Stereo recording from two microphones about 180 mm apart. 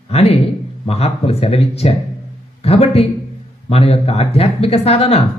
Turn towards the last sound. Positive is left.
turn(degrees=35)  # may be behind; listen again after turning